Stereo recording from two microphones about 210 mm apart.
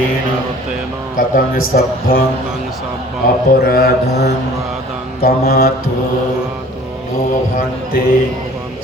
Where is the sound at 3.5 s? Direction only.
45° left (ahead or behind).